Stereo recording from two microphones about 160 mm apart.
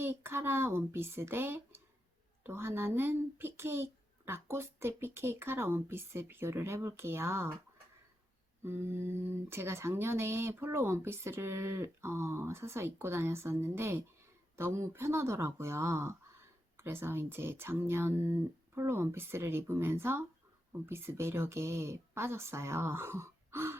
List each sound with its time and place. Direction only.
0.0 s speech: 15° right (ahead or behind)
8.6 s speech: 15° right (ahead or behind)